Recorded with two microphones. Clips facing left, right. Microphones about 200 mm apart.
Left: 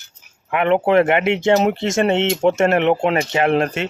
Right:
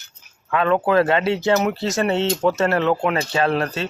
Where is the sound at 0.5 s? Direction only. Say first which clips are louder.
Left 3 dB; 20° left (ahead or behind).